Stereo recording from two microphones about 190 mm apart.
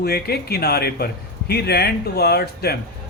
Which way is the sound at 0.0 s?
55° left (ahead or behind).